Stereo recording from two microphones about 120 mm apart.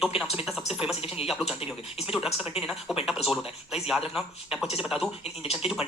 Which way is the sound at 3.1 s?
Centre (ahead or behind).